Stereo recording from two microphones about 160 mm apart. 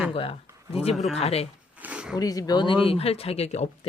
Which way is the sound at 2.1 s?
20° left (ahead or behind).